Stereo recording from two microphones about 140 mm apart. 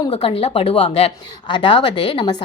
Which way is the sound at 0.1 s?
45° left (ahead or behind).